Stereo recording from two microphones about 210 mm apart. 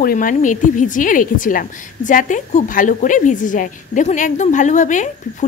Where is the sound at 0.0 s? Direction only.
40° left (ahead or behind).